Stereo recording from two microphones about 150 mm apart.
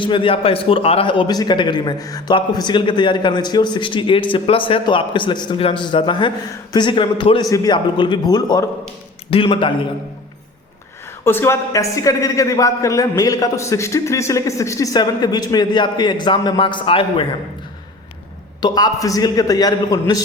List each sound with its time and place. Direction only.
0.0 s a man's voice: 35° left (ahead or behind)
9.3 s a man's voice: 35° left (ahead or behind)
11.2 s a woman's voice: 15° left (ahead or behind); by 17.2 s 35° left (ahead or behind)
18.6 s a woman's voice: 25° left (ahead or behind)